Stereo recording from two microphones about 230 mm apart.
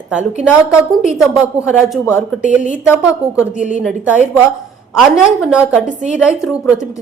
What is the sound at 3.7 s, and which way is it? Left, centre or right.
A woman's voice, centre.